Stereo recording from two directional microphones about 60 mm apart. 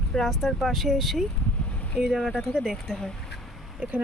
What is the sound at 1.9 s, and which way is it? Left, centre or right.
Speech, centre.